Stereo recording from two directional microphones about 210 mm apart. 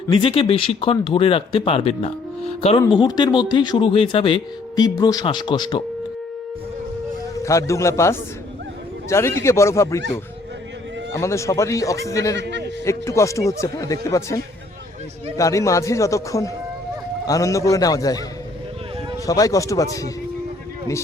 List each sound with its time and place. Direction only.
0.1 s speech: 25° left (ahead or behind)
7.4 s speech: 15° left (ahead or behind)
11.1 s speech: 15° left (ahead or behind)
12.4 s a sound: 55° right (ahead or behind)
12.8 s speech: 15° left (ahead or behind)
19.2 s speech: 15° left (ahead or behind)